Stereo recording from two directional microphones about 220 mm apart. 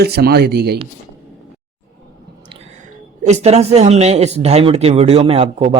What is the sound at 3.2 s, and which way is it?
Speech, 30° right (ahead or behind).